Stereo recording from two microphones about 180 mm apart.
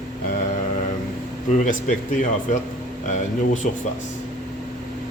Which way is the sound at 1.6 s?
45° left (ahead or behind).